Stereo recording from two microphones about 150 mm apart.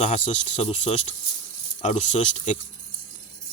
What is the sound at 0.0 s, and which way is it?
Speech, 55° left (ahead or behind).